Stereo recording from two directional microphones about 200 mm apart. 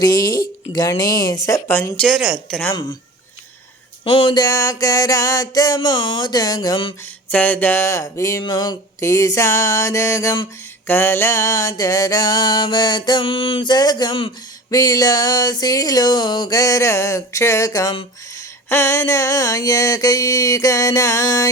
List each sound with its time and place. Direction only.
0.3 s mantra: 20° left (ahead or behind); by 2.7 s 5° left (ahead or behind)
4.0 s a sound: 25° left (ahead or behind)
7.0 s mantra: 10° left (ahead or behind)